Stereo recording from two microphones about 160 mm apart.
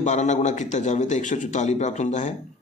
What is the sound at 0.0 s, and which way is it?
Speech, 50° left (ahead or behind).